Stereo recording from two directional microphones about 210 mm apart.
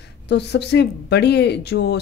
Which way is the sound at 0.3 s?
55° left (ahead or behind).